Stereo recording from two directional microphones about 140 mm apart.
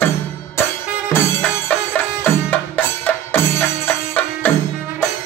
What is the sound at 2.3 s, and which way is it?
Music, 10° left (ahead or behind).